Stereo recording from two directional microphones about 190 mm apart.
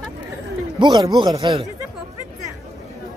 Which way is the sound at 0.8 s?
20° right (ahead or behind).